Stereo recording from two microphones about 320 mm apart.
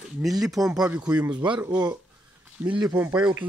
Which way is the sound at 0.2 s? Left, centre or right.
Centre.